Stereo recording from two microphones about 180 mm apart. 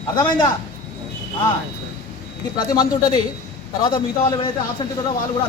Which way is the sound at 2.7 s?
20° left (ahead or behind).